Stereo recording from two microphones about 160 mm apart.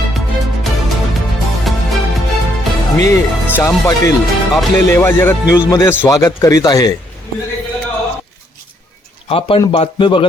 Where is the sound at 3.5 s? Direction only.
15° left (ahead or behind).